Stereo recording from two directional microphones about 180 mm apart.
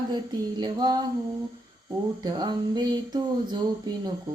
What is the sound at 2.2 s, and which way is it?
Speech, 20° right (ahead or behind).